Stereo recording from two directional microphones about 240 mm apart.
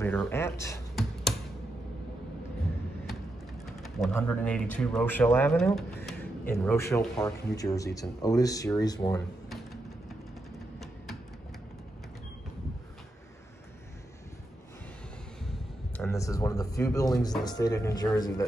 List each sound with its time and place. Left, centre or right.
0.0 s speech: centre
3.6 s speech: centre
16.0 s speech: centre